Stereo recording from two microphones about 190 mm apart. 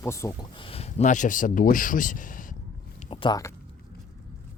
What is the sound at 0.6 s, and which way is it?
Speech, 30° left (ahead or behind).